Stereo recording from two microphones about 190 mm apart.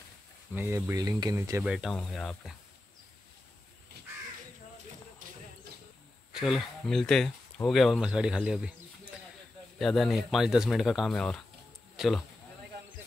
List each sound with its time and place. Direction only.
0.6 s speech: 10° right (ahead or behind)
1.6 s speech: 5° right (ahead or behind)
6.3 s speech: centre (ahead or behind)
9.8 s speech: centre (ahead or behind)